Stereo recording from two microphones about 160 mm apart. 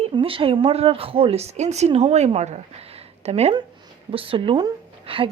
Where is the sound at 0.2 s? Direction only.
35° right (ahead or behind).